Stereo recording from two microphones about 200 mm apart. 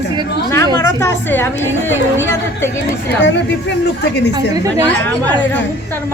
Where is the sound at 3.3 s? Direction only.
65° left (ahead or behind).